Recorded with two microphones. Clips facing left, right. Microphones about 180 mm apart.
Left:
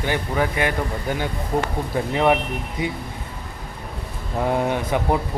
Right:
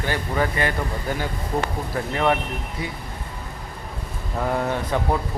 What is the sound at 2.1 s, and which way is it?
Speech, 15° left (ahead or behind).